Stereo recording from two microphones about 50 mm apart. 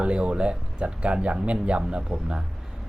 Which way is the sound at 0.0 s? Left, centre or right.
Right.